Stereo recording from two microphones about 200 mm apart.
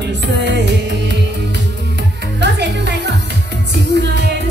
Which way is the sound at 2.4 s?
60° right (ahead or behind).